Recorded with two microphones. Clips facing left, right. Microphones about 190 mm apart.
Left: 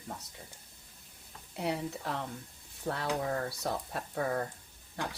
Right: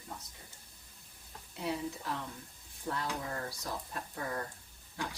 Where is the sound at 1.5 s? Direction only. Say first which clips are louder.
Left 2 dB; 65° left (ahead or behind).